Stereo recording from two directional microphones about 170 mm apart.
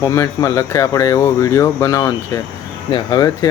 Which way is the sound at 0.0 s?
20° left (ahead or behind).